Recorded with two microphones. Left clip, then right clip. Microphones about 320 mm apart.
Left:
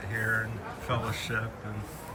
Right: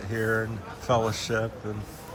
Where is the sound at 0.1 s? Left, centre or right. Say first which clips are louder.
Right 3 dB; centre.